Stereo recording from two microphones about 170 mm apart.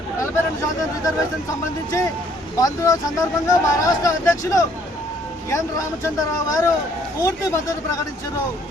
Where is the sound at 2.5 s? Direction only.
20° left (ahead or behind).